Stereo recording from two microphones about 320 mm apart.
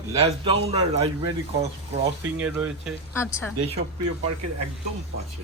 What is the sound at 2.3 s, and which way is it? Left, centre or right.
Speech, centre.